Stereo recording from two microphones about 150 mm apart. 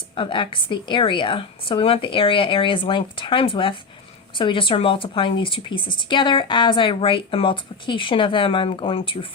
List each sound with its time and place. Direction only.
0.2 s speech: 35° left (ahead or behind)